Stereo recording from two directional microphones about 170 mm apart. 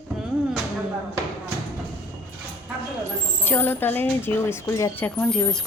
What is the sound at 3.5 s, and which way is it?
Speech, 10° left (ahead or behind).